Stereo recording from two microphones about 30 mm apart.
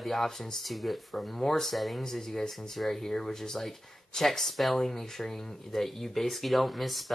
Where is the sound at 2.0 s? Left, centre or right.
Centre.